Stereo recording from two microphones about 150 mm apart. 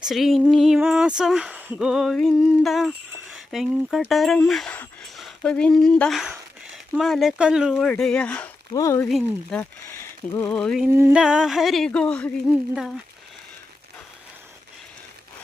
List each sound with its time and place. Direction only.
0.0 s speech: centre (ahead or behind)
8.7 s speech: 20° left (ahead or behind)
9.0 s speech: centre (ahead or behind)
9.6 s speech: 15° left (ahead or behind)
10.5 s speech: 5° left (ahead or behind)
10.8 s a sound: 15° right (ahead or behind)
11.2 s a woman's voice: 5° right (ahead or behind)